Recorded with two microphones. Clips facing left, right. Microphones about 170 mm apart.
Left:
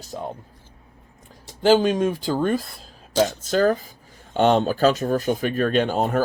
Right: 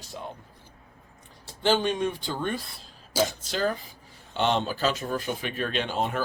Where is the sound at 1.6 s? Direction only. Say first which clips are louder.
Left 7 dB; 40° left (ahead or behind).